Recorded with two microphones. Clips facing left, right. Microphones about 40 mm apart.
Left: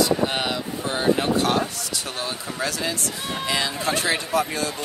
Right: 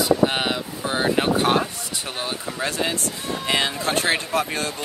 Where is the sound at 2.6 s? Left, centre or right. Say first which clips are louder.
Right 2 dB; right.